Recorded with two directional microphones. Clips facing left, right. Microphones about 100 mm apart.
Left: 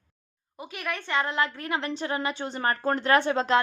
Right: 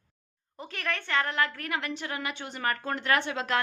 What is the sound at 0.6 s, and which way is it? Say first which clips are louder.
A woman's voice: left 1 dB; 10° left (ahead or behind).